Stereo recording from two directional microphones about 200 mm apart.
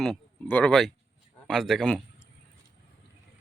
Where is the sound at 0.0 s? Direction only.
5° left (ahead or behind).